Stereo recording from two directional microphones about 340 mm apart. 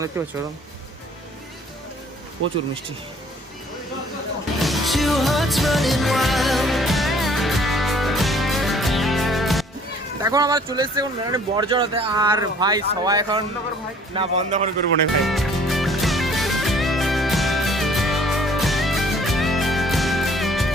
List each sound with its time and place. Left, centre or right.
0.1 s speech: centre
4.6 s music: centre
10.2 s a man's voice: centre
15.2 s music: centre